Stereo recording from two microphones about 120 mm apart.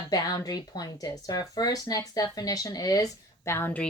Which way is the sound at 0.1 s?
30° left (ahead or behind).